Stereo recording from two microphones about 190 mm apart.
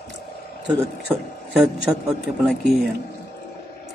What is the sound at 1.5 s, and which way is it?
A man's voice, 5° right (ahead or behind).